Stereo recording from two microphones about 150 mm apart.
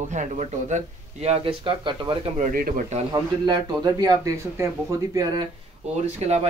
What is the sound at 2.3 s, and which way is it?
Speech, 65° right (ahead or behind).